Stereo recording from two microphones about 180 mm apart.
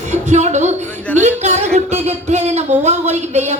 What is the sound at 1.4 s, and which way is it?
Music, 40° right (ahead or behind).